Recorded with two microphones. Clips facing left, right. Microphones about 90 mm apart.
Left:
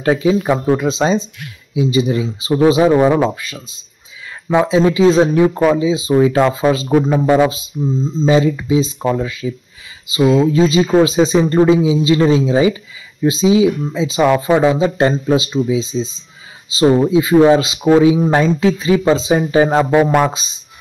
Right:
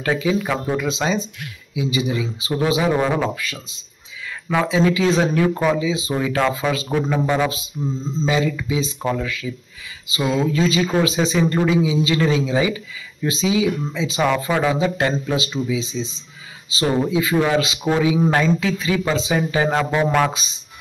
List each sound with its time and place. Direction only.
0.0 s speech: 30° left (ahead or behind)